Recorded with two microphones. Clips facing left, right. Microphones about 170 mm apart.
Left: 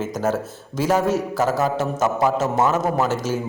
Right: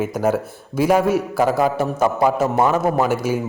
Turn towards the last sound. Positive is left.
turn(degrees=-10)  # may be behind; listen again after turning